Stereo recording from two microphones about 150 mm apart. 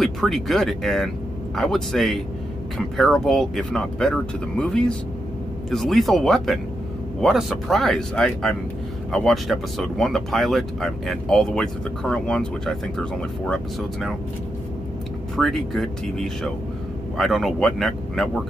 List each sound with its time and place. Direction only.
0.0 s speech: centre (ahead or behind)
15.3 s speech: centre (ahead or behind)